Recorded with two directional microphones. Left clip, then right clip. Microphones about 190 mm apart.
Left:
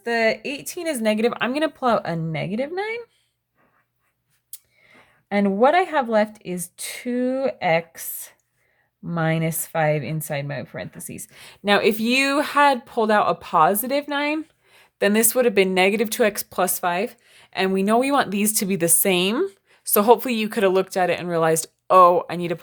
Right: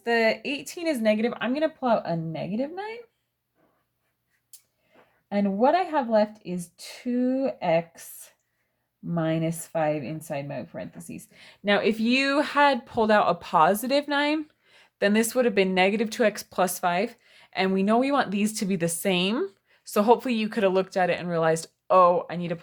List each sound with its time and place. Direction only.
0.0 s speech: 15° left (ahead or behind); by 3.0 s 40° left (ahead or behind)
5.3 s speech: 45° left (ahead or behind)
9.1 s speech: 40° left (ahead or behind)